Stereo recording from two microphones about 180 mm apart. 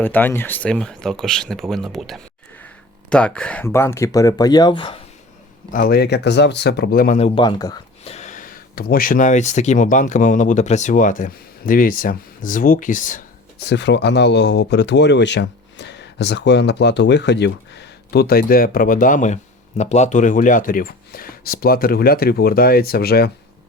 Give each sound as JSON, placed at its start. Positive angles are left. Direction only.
{"t": 0.0, "sound": "speech", "side_deg": 10}
{"t": 5.7, "sound": "speech", "side_deg": 55}
{"t": 7.3, "sound": "speech", "side_deg": 25}
{"t": 8.0, "sound": "speech", "side_deg": 40}
{"t": 13.7, "sound": "speech", "side_deg": 75}